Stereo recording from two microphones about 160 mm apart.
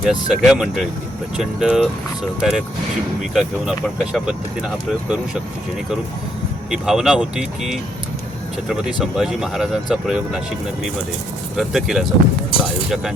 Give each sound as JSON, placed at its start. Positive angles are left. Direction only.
{"t": 0.0, "sound": "speech", "side_deg": 0}
{"t": 6.7, "sound": "speech", "side_deg": -5}
{"t": 11.5, "sound": "speech", "side_deg": 0}
{"t": 12.5, "sound": "speech", "side_deg": 35}